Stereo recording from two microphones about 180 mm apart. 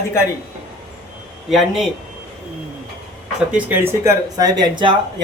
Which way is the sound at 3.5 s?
10° right (ahead or behind).